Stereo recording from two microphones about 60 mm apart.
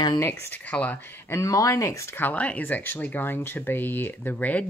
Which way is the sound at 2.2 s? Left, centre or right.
Left.